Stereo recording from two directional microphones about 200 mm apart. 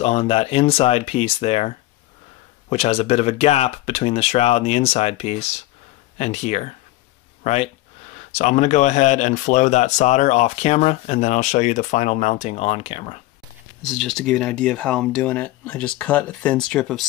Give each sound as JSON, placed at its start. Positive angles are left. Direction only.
{"t": 0.0, "sound": "speech", "side_deg": 30}
{"t": 13.8, "sound": "speech", "side_deg": 0}